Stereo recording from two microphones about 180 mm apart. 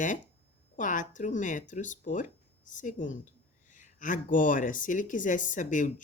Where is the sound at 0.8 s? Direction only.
45° left (ahead or behind).